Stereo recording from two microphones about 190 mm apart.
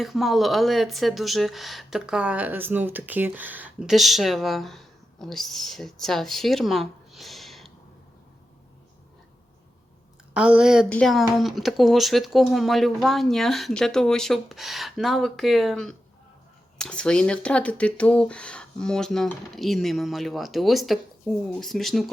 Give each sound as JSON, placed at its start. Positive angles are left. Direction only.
{"t": 0.0, "sound": "speech", "side_deg": 0}
{"t": 10.3, "sound": "speech", "side_deg": -5}